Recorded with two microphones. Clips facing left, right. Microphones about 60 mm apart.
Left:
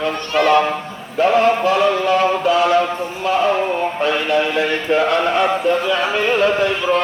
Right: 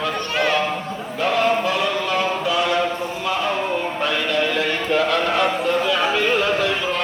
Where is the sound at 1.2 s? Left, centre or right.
Left.